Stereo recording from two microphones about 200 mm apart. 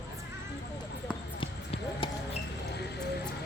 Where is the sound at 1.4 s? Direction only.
25° left (ahead or behind).